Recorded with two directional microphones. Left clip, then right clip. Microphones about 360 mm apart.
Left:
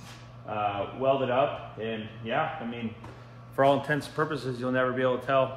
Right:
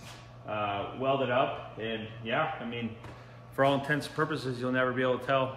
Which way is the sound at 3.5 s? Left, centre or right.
Centre.